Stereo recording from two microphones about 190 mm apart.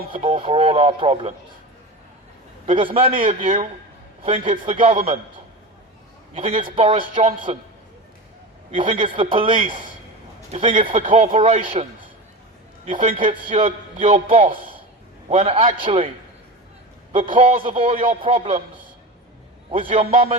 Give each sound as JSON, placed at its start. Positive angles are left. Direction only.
{"t": 0.1, "sound": "speech", "side_deg": -30}
{"t": 2.6, "sound": "speech", "side_deg": -30}
{"t": 3.2, "sound": "speech", "side_deg": -40}
{"t": 4.2, "sound": "a man's voice", "side_deg": -30}
{"t": 6.3, "sound": "a man's voice", "side_deg": -30}
{"t": 8.8, "sound": "a man's voice", "side_deg": -30}
{"t": 17.1, "sound": "a man's voice", "side_deg": -25}
{"t": 19.7, "sound": "speech", "side_deg": -30}